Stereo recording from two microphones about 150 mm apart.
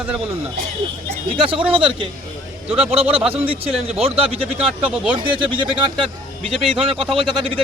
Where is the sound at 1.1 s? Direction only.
35° right (ahead or behind).